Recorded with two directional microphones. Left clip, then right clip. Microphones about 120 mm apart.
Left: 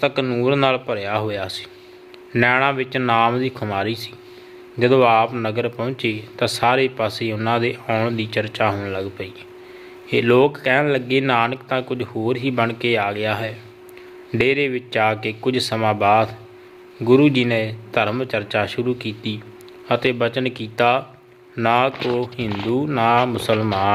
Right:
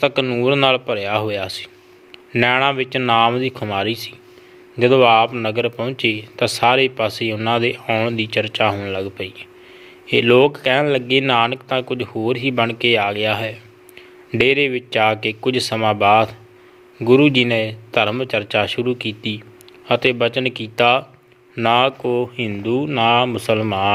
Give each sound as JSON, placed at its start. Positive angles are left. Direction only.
{"t": 0.0, "sound": "a man's voice", "side_deg": -25}